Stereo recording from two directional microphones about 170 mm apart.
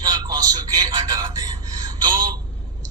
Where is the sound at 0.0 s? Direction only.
25° right (ahead or behind).